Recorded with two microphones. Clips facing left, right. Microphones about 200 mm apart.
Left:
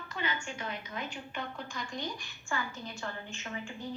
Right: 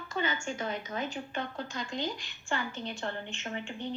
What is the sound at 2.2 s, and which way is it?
Speech, 75° right (ahead or behind).